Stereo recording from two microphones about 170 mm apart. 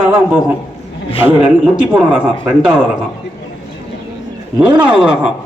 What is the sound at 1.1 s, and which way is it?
Speech, 30° left (ahead or behind).